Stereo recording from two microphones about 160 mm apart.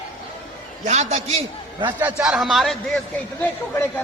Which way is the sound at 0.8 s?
40° right (ahead or behind).